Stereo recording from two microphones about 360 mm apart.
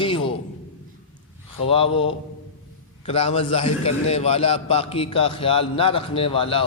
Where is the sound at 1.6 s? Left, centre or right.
Centre.